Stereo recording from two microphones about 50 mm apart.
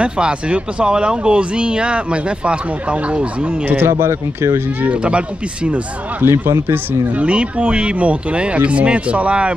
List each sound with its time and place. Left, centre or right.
0.0 s speech: right
3.6 s speech: right
4.0 s speech: right
4.8 s speech: right
6.2 s speech: right
7.2 s speech: right